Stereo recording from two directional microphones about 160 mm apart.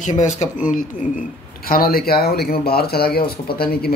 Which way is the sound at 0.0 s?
50° left (ahead or behind).